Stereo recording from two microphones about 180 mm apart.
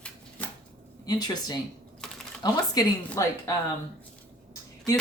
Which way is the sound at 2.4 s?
20° left (ahead or behind).